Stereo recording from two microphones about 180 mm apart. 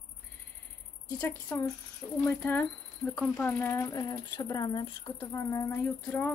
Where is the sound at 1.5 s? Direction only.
10° left (ahead or behind).